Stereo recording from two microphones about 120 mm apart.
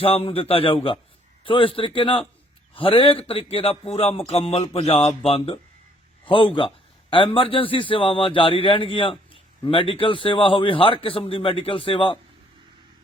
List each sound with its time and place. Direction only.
0.0 s a man's voice: 50° left (ahead or behind)
6.2 s a man's voice: 45° left (ahead or behind)